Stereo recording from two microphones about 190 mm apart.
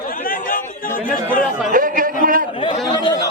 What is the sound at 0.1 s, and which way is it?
Chatter, 50° left (ahead or behind).